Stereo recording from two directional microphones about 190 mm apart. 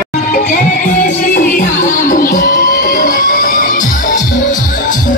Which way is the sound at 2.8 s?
45° left (ahead or behind).